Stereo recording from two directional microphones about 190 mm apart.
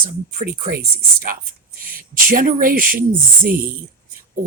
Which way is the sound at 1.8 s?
50° right (ahead or behind).